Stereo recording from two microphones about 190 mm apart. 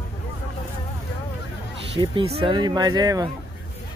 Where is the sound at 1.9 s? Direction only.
30° right (ahead or behind).